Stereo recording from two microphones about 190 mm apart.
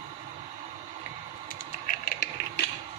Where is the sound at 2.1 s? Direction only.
60° left (ahead or behind).